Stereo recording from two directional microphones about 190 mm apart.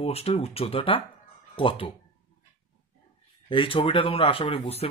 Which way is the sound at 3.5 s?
25° left (ahead or behind).